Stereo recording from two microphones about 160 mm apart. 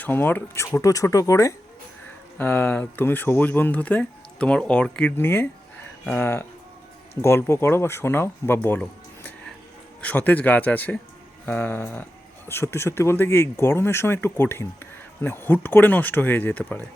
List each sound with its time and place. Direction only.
0.0 s speech: 10° left (ahead or behind)